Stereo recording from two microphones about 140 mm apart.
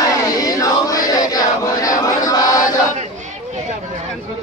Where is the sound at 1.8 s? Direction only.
25° left (ahead or behind).